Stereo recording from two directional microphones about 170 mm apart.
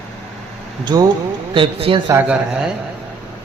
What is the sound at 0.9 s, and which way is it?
Speech, 25° right (ahead or behind).